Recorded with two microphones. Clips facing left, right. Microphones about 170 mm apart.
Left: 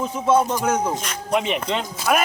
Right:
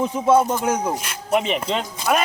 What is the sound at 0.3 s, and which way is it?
Speech, 10° right (ahead or behind).